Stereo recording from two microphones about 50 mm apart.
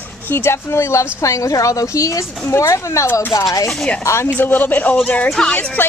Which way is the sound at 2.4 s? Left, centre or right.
Left.